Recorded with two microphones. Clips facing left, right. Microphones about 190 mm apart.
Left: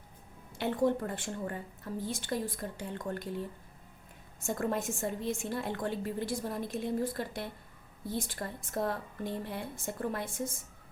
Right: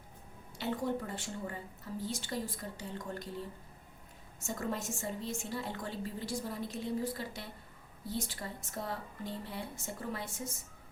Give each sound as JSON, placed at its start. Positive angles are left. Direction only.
{"t": 0.6, "sound": "a woman's voice", "side_deg": 50}
{"t": 4.4, "sound": "a woman's voice", "side_deg": 55}